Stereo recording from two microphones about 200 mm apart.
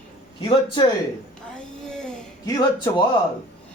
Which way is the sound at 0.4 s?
25° left (ahead or behind).